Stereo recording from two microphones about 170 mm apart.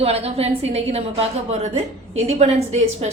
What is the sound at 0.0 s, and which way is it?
A woman's voice, 35° right (ahead or behind).